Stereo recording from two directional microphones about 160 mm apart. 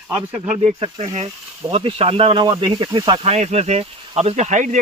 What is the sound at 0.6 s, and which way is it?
Speech, 40° right (ahead or behind).